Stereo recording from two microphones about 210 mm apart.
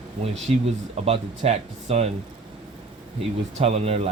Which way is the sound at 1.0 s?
30° right (ahead or behind).